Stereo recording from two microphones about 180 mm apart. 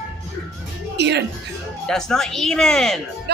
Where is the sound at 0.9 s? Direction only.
70° right (ahead or behind).